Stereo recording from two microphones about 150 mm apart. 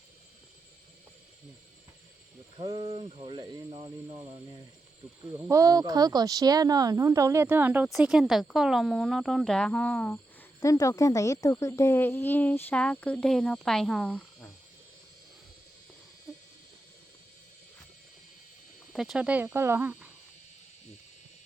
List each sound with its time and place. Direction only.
2.6 s speech: 30° right (ahead or behind)
5.2 s speech: 25° right (ahead or behind)
7.9 s speech: centre (ahead or behind)
10.6 s speech: 20° left (ahead or behind); by 14.2 s 5° left (ahead or behind)
18.9 s speech: 5° right (ahead or behind)